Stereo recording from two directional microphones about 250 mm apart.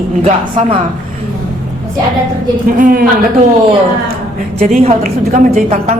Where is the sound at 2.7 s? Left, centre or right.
Right.